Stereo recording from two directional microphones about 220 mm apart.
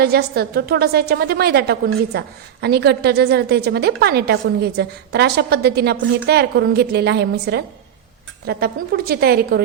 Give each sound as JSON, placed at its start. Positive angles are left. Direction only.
{"t": 0.0, "sound": "a woman's voice", "side_deg": -45}